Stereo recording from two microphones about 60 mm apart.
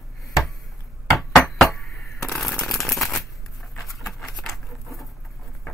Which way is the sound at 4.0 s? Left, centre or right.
Centre.